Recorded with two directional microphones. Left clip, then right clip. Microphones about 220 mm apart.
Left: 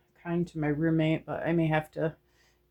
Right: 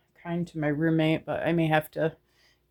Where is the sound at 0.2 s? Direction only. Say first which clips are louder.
Right 1 dB; 35° right (ahead or behind).